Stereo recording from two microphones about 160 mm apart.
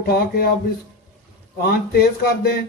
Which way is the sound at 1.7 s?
80° left.